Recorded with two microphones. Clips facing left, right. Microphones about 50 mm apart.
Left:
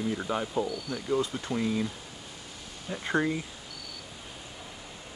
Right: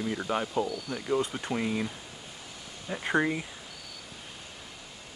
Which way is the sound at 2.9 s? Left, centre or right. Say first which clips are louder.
Right 1 dB; centre.